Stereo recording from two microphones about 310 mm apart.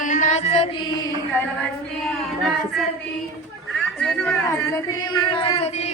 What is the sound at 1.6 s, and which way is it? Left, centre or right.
Female singing, centre.